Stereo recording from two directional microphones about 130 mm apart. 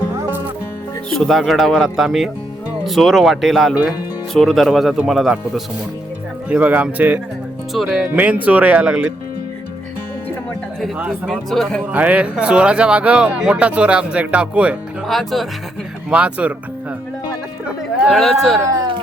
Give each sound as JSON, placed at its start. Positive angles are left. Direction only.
{"t": 1.1, "sound": "speech", "side_deg": 0}
{"t": 7.7, "sound": "speech", "side_deg": 0}
{"t": 8.2, "sound": "speech", "side_deg": -10}
{"t": 10.9, "sound": "speech", "side_deg": -10}
{"t": 11.5, "sound": "speech", "side_deg": 0}
{"t": 11.9, "sound": "speech", "side_deg": -10}
{"t": 17.7, "sound": "speech", "side_deg": -5}
{"t": 18.7, "sound": "a sound", "side_deg": -35}